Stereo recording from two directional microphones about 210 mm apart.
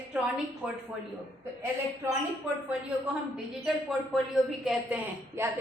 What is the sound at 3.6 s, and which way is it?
A woman's voice, centre (ahead or behind).